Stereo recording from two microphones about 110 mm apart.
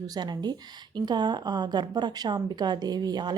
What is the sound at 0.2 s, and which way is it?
A woman's voice, 40° right (ahead or behind).